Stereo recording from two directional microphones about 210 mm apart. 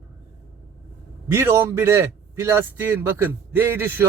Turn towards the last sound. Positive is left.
turn(degrees=-10)  # may be behind; listen again after turning